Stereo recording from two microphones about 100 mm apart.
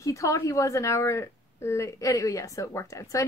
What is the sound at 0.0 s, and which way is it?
A woman's voice, 30° left (ahead or behind).